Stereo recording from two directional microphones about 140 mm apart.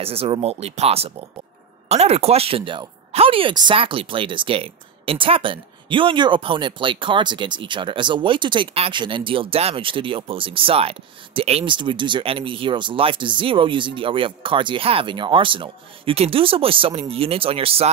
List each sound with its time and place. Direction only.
0.0 s speech: 45° right (ahead or behind)